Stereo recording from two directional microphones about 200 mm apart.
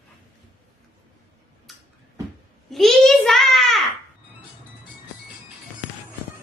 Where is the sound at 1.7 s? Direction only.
Centre (ahead or behind).